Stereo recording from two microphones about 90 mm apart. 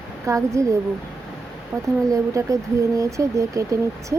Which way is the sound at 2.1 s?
35° right (ahead or behind).